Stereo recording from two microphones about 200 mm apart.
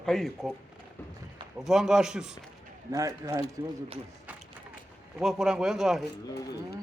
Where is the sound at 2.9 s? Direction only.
15° right (ahead or behind).